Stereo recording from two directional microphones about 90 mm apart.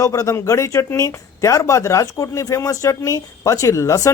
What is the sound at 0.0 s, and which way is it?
Speech, 35° left (ahead or behind).